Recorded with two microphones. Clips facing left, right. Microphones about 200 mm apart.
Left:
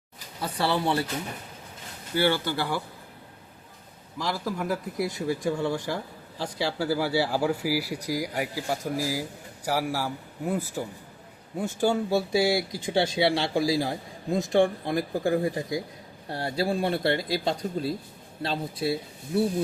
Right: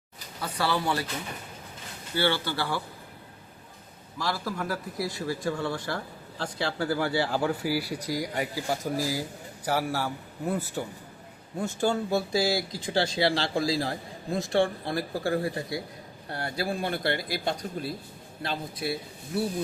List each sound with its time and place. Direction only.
0.4 s speech: 25° left (ahead or behind)
2.2 s a man's voice: 15° left (ahead or behind)
4.2 s a man's voice: 15° left (ahead or behind)